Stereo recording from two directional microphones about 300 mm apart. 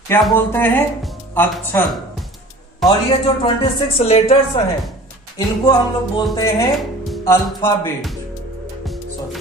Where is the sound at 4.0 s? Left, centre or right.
Centre.